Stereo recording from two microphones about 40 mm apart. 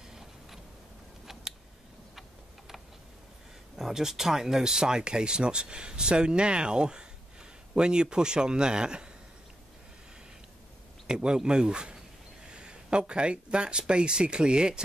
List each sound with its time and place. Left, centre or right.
0.1 s a sound: centre
3.9 s speech: centre
11.1 s speech: centre